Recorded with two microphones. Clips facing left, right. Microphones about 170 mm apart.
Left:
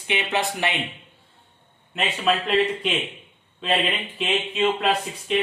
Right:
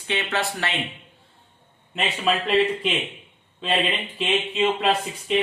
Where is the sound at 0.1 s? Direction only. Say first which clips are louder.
Left 1 dB; 20° left (ahead or behind).